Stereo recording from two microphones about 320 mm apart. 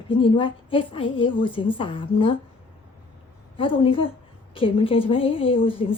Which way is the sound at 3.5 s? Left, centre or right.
Centre.